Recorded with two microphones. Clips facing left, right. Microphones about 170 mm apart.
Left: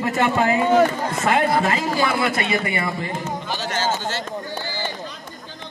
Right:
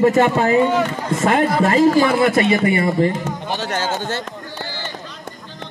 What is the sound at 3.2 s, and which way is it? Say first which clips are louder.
Speech: right 3 dB; 60° right (ahead or behind).